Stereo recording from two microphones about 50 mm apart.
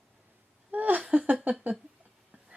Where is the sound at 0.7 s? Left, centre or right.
Right.